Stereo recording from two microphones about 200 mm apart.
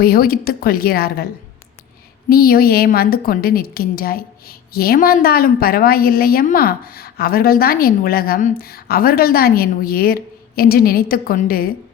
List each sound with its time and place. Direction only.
0.0 s a woman's voice: 50° left (ahead or behind)
2.3 s a woman's voice: 50° left (ahead or behind)